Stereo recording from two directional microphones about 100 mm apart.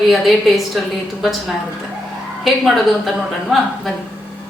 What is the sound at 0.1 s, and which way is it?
Speech, centre (ahead or behind).